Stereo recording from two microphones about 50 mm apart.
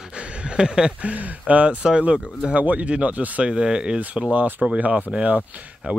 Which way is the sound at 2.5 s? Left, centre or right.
Right.